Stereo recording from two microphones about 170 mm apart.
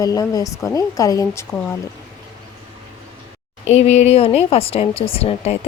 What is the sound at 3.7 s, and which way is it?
Speech, 40° left (ahead or behind).